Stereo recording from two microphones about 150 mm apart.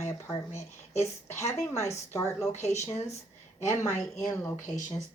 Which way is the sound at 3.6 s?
20° left (ahead or behind).